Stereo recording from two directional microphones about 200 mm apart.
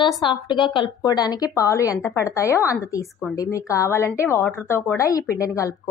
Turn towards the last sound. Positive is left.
turn(degrees=15)  # may be behind; listen again after turning